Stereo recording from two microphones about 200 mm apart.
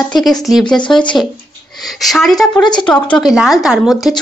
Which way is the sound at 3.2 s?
Centre (ahead or behind).